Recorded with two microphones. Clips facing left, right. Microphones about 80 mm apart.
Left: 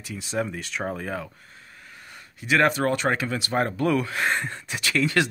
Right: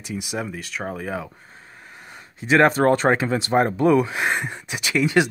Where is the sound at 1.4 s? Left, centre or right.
Right.